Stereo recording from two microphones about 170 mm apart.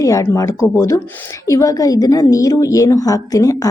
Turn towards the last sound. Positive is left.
turn(degrees=20)  # may be behind; listen again after turning